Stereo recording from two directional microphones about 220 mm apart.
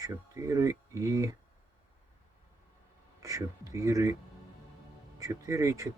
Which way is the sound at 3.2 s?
15° right (ahead or behind).